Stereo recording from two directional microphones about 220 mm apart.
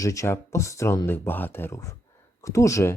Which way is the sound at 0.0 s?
15° left (ahead or behind).